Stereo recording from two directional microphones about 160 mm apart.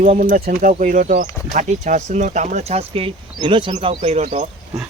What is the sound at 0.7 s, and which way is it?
Speech, 50° right (ahead or behind).